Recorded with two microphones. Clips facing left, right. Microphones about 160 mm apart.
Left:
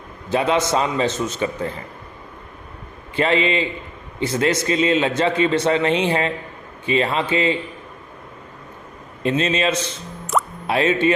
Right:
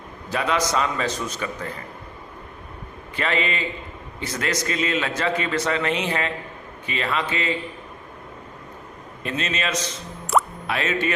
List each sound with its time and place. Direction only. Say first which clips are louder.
0.3 s a man's voice: left 5 dB; 25° left (ahead or behind)
3.2 s a man's voice: left 6 dB; 30° left (ahead or behind)
9.2 s a man's voice: left 8 dB; 30° left (ahead or behind)